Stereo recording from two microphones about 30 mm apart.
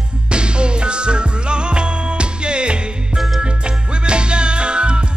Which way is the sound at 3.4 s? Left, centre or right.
Right.